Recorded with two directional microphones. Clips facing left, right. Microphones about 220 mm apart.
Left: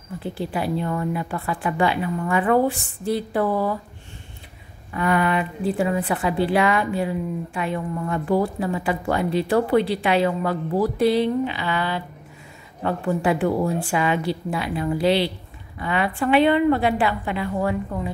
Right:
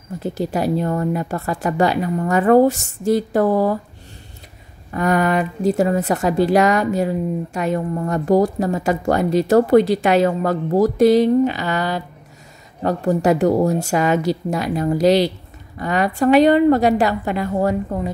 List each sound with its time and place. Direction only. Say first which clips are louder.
0.2 s a woman's voice: right 6 dB; 40° right (ahead or behind)
4.9 s a woman's voice: right 4 dB; 45° right (ahead or behind)